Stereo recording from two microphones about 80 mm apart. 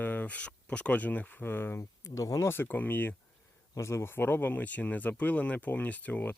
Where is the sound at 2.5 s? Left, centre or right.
Left.